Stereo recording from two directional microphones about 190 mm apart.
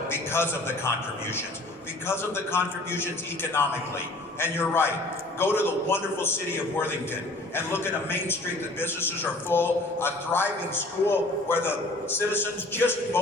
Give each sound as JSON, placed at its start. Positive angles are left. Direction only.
{"t": 0.1, "sound": "music", "side_deg": 10}
{"t": 0.9, "sound": "a man's voice", "side_deg": 10}